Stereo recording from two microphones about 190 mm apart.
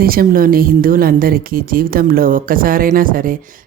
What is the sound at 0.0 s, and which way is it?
A woman's voice, 50° right (ahead or behind).